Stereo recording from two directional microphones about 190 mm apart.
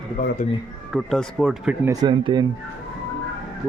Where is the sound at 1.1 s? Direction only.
Centre (ahead or behind).